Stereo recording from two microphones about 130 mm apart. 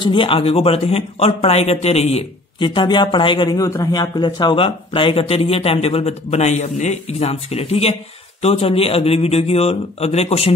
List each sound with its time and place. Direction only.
0.0 s a man's voice: 40° left (ahead or behind)
2.6 s a man's voice: 40° left (ahead or behind)